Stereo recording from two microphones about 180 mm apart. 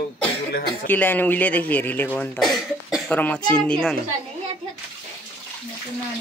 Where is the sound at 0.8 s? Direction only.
10° left (ahead or behind).